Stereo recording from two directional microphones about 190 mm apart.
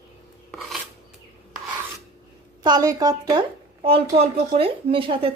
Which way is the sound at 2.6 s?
20° right (ahead or behind).